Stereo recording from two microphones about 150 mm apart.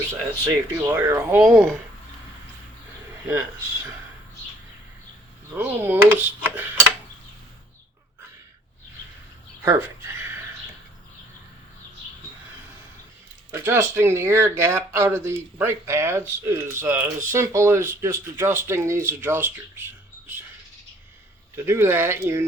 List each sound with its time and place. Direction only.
0.1 s speech: 20° right (ahead or behind); by 1.7 s 5° right (ahead or behind)
5.5 s speech: 15° right (ahead or behind)
9.6 s a sound: 20° right (ahead or behind)
13.5 s speech: 15° right (ahead or behind)
19.0 s a sound: 15° right (ahead or behind)
21.5 s speech: 15° right (ahead or behind)